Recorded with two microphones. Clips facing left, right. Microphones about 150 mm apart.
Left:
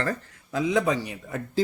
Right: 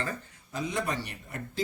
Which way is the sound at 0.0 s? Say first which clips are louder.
Left 6 dB; 85° left.